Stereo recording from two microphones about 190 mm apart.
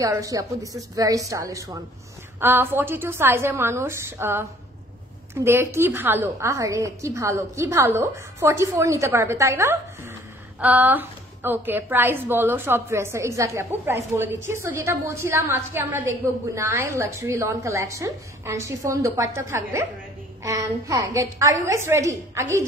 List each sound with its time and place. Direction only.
0.0 s a woman's voice: 15° right (ahead or behind)